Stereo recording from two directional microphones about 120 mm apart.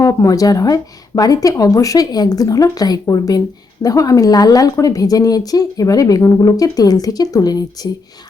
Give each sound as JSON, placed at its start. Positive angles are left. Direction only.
{"t": 0.0, "sound": "speech", "side_deg": 25}